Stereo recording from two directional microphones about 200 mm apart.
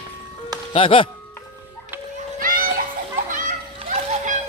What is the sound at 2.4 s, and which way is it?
Children playing, 45° right (ahead or behind).